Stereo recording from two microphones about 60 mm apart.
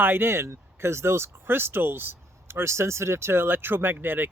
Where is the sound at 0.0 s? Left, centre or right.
Right.